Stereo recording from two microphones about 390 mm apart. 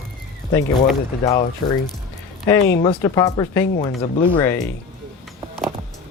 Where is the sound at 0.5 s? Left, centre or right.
Centre.